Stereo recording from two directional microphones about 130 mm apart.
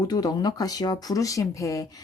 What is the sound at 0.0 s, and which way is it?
Speech, 30° left (ahead or behind).